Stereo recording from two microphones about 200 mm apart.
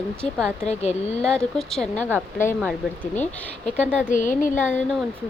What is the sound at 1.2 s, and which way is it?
Speech, 5° left (ahead or behind).